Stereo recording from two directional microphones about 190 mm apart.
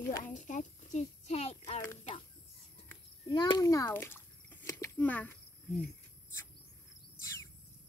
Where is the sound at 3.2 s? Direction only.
25° left (ahead or behind); by 5.4 s 10° left (ahead or behind).